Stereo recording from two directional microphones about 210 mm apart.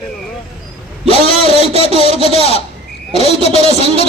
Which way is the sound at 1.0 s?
30° right (ahead or behind).